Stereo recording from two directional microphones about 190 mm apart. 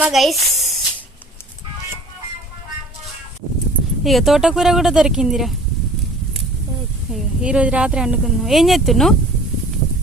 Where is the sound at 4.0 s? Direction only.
Centre (ahead or behind).